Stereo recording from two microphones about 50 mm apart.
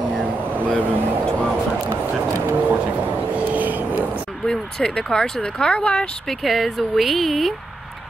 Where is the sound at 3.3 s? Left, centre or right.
Right.